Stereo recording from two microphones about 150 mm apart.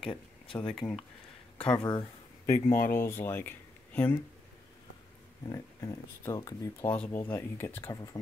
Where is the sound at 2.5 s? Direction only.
60° left (ahead or behind).